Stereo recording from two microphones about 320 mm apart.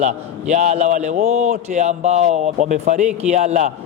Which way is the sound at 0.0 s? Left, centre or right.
Right.